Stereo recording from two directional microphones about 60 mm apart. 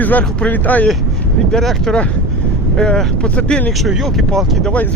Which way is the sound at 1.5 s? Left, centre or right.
Centre.